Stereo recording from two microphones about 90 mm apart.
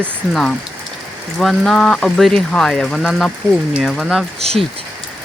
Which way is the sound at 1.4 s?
5° left (ahead or behind).